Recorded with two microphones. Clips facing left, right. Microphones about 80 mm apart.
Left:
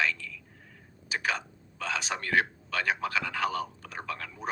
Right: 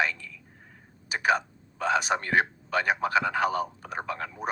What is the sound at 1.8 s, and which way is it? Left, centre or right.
Speech, right.